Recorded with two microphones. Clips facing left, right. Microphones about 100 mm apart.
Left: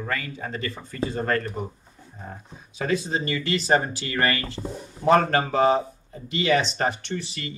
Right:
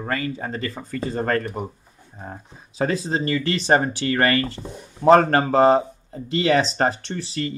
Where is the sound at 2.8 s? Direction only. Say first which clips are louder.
Right 3 dB; 35° right (ahead or behind).